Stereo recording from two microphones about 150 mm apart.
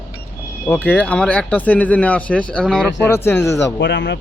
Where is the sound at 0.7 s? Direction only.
10° left (ahead or behind).